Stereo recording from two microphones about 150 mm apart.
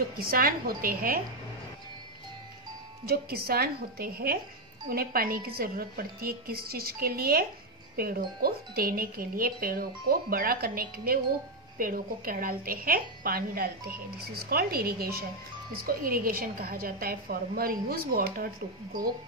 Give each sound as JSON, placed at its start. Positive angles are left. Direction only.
{"t": 0.2, "sound": "speech", "side_deg": -80}
{"t": 3.1, "sound": "a woman's voice", "side_deg": -90}
{"t": 15.8, "sound": "speech", "side_deg": -70}